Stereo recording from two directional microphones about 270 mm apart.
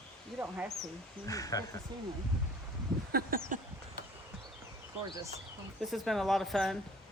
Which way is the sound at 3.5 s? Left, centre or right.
Right.